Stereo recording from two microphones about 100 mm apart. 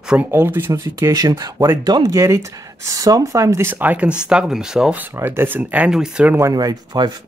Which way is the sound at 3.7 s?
15° right (ahead or behind).